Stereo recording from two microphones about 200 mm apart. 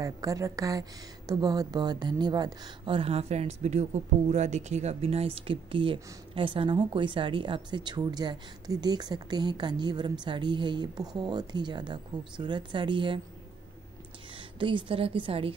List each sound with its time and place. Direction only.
0.0 s a woman's voice: 15° right (ahead or behind)
14.6 s a woman's voice: 25° right (ahead or behind)